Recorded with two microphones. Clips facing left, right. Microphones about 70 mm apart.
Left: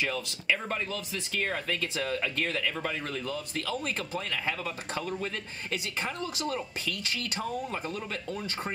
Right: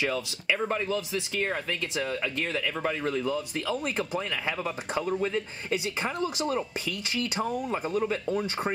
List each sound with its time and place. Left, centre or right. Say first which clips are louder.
0.0 s speech: right 3 dB; centre